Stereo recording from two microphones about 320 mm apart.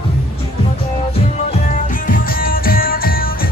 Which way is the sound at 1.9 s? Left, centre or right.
Left.